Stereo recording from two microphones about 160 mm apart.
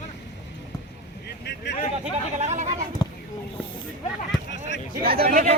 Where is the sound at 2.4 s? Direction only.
45° right (ahead or behind).